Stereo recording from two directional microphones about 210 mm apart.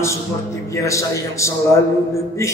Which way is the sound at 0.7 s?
15° left (ahead or behind).